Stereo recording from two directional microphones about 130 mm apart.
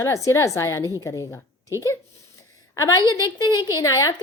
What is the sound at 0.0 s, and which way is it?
A woman's voice, 20° left (ahead or behind).